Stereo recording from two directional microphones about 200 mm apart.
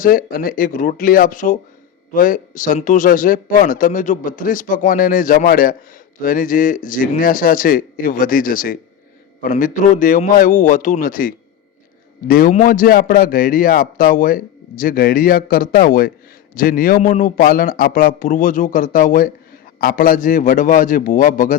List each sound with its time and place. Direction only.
0.0 s a man's voice: 45° left (ahead or behind)